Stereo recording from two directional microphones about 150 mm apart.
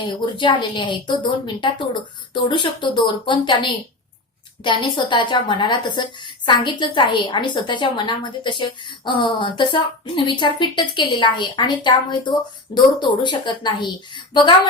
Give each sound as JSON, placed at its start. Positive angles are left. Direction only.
{"t": 0.3, "sound": "a woman's voice", "side_deg": 30}